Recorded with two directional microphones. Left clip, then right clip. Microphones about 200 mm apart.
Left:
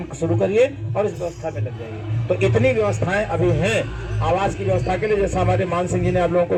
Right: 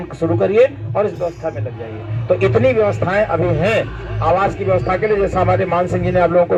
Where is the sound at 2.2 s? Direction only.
5° right (ahead or behind).